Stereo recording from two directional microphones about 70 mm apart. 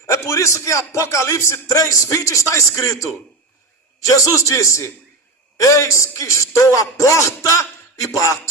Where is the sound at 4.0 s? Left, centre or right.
Left.